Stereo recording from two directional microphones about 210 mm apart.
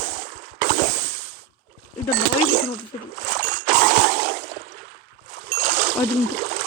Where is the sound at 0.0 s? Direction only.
55° right (ahead or behind).